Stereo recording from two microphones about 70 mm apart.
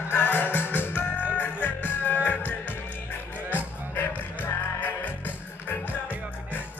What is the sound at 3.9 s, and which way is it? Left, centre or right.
Music, left.